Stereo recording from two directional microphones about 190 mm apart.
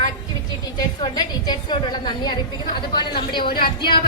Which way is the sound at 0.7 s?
20° left (ahead or behind).